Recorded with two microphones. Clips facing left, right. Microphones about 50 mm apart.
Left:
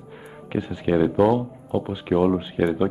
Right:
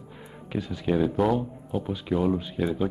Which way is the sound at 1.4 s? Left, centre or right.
Centre.